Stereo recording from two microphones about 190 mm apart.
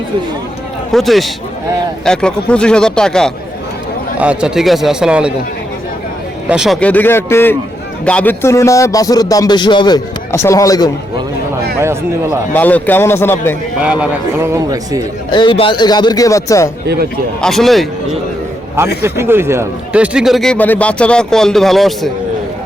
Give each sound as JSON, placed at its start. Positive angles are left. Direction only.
{"t": 0.9, "sound": "speech", "side_deg": 0}
{"t": 6.5, "sound": "a man's voice", "side_deg": 0}
{"t": 11.8, "sound": "a man's voice", "side_deg": -15}
{"t": 12.5, "sound": "a man's voice", "side_deg": 10}
{"t": 13.8, "sound": "a man's voice", "side_deg": -10}
{"t": 15.3, "sound": "speech", "side_deg": 25}
{"t": 16.8, "sound": "a man's voice", "side_deg": -60}
{"t": 17.4, "sound": "speech", "side_deg": 0}
{"t": 19.0, "sound": "speech", "side_deg": -15}